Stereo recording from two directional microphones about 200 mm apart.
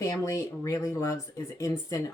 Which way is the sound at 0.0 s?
15° left (ahead or behind).